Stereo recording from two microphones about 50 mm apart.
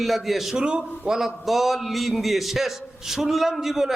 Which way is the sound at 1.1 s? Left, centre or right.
Centre.